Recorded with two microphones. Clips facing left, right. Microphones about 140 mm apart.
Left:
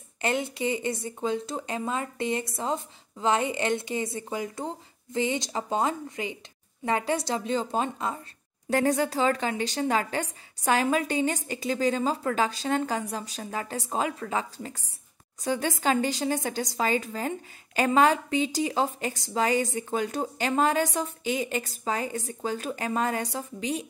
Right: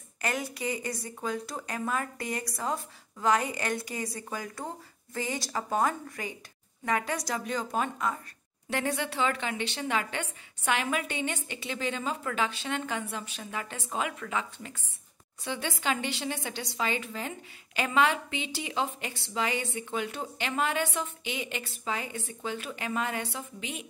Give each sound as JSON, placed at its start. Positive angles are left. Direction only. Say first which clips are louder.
{"t": 0.2, "sound": "speech", "louder": "left 5 dB", "side_deg": 25}
{"t": 8.6, "sound": "a woman's voice", "louder": "left 7 dB", "side_deg": 40}